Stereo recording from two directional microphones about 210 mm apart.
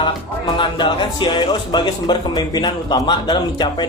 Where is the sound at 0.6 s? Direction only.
25° left (ahead or behind).